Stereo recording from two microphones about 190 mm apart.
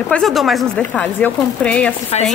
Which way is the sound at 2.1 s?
35° left (ahead or behind).